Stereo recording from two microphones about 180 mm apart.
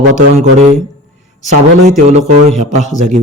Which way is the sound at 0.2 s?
40° right (ahead or behind).